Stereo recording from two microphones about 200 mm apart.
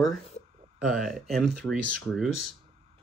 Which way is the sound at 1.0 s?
Centre (ahead or behind).